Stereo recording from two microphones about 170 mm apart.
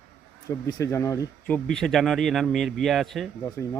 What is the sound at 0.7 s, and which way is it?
Speech, 20° left (ahead or behind).